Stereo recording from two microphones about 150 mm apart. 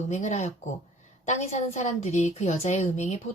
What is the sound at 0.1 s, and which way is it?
A woman's voice, 50° left (ahead or behind).